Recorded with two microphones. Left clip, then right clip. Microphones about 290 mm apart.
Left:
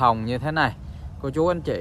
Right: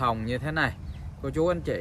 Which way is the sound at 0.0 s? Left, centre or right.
Centre.